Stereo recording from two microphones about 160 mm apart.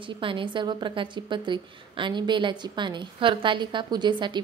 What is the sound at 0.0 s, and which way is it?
A woman's voice, 30° right (ahead or behind).